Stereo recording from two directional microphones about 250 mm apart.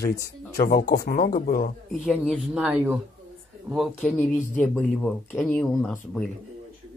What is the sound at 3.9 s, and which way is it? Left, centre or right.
Speech, centre.